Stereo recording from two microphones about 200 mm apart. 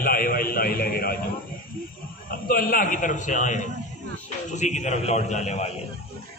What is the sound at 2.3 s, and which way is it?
A man's voice, 45° left (ahead or behind).